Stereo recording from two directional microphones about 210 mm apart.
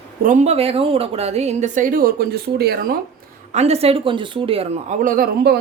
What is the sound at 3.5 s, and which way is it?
Speech, 30° right (ahead or behind).